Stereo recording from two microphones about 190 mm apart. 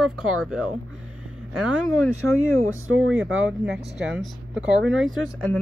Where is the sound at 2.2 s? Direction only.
90° right.